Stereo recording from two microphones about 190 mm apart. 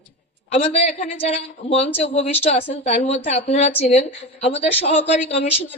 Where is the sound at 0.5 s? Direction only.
35° left (ahead or behind).